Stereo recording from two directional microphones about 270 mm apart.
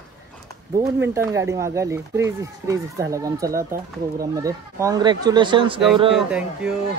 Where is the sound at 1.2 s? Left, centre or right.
Centre.